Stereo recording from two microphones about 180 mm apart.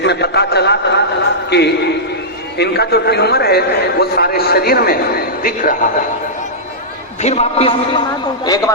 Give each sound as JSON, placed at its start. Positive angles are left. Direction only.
{"t": 0.0, "sound": "a sound", "side_deg": 65}
{"t": 1.5, "sound": "a man's voice", "side_deg": 70}
{"t": 7.2, "sound": "a man's voice", "side_deg": 35}
{"t": 8.4, "sound": "a woman's voice", "side_deg": 20}